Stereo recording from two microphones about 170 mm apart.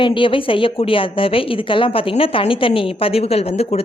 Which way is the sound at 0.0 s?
30° left (ahead or behind).